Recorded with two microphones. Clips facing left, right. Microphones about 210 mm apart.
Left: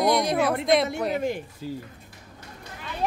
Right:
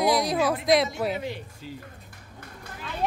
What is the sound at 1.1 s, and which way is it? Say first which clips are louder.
Speech: left 6 dB; 50° left (ahead or behind).